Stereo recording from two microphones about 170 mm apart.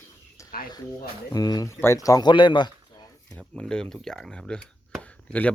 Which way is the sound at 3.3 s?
5° left (ahead or behind).